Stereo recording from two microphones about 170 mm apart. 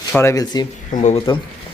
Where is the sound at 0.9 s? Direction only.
45° left (ahead or behind).